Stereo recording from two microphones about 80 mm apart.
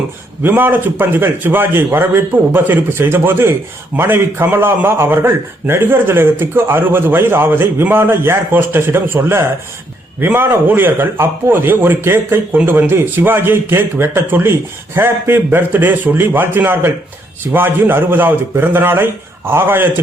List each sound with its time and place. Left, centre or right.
0.4 s a man's voice: right